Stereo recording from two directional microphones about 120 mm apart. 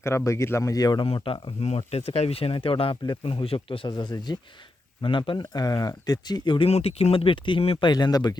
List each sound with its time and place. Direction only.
0.3 s speech: 25° left (ahead or behind)
1.0 s speech: 50° left (ahead or behind)
7.9 s speech: 35° left (ahead or behind)